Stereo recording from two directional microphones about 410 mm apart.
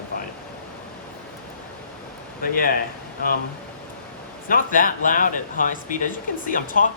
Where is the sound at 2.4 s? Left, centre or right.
Left.